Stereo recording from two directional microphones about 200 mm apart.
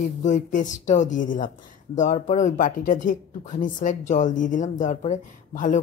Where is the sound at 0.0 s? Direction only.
40° left (ahead or behind).